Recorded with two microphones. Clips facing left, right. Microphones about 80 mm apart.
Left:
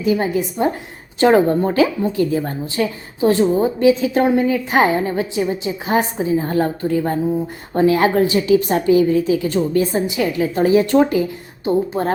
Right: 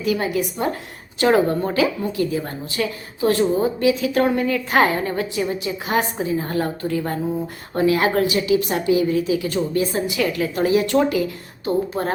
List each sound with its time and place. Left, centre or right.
0.0 s a woman's voice: left